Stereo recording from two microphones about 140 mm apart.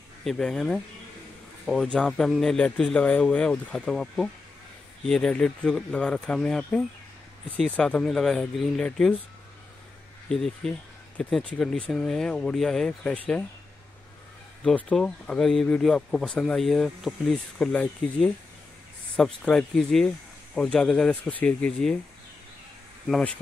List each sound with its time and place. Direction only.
0.2 s speech: 5° left (ahead or behind)
10.3 s speech: 5° left (ahead or behind)
14.6 s speech: 5° left (ahead or behind)
23.0 s speech: 5° left (ahead or behind)